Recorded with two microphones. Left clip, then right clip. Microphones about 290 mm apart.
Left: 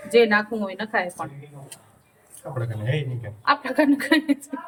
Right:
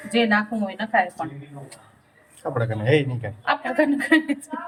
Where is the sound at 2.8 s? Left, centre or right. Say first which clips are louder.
Right 10 dB; centre.